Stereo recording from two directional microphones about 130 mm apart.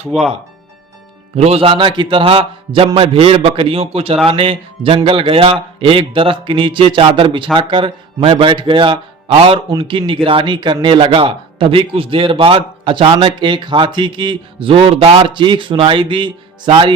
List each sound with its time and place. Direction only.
1.4 s a man's voice: 50° right (ahead or behind)